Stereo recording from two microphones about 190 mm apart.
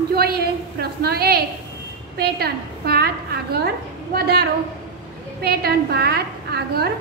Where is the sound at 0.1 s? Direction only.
55° right (ahead or behind).